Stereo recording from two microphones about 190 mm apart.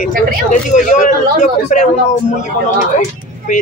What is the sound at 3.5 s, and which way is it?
Speech, 45° left (ahead or behind).